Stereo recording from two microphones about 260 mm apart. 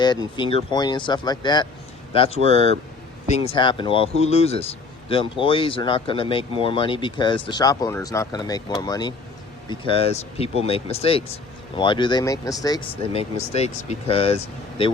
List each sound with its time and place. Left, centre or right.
0.0 s a man's voice: centre